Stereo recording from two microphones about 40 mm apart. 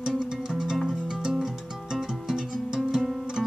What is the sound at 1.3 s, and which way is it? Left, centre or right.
Music, centre.